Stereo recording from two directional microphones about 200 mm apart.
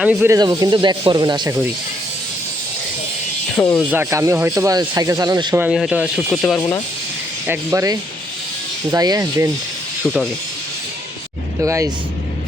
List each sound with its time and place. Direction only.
0.0 s speech: 10° right (ahead or behind)
3.5 s speech: 5° left (ahead or behind)
3.8 s speech: 10° right (ahead or behind)
5.5 s speech: 5° right (ahead or behind)
7.4 s speech: 10° right (ahead or behind)
11.6 s speech: 15° right (ahead or behind)